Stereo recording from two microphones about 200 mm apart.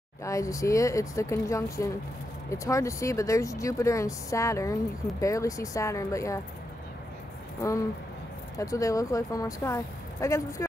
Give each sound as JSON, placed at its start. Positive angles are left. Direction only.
{"t": 0.2, "sound": "speech", "side_deg": 15}
{"t": 8.5, "sound": "speech", "side_deg": 15}